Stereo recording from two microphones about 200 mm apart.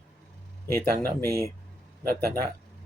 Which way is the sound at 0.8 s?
50° right (ahead or behind).